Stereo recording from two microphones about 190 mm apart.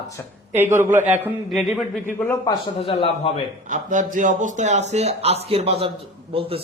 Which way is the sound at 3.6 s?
40° right (ahead or behind).